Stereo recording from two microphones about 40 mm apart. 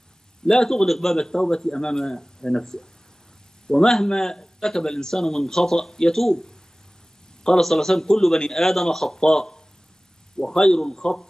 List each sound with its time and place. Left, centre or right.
0.5 s speech: centre
1.3 s speech: centre